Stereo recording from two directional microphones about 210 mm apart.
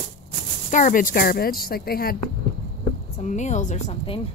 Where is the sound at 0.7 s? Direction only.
40° left (ahead or behind).